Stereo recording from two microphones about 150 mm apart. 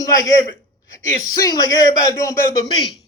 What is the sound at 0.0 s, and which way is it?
Speech, 20° left (ahead or behind).